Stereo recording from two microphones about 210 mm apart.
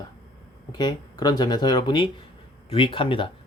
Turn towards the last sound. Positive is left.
turn(degrees=25)  # may be behind; listen again after turning